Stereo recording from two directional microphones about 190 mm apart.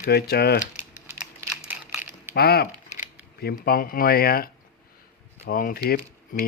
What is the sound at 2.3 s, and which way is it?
Speech, 55° left (ahead or behind).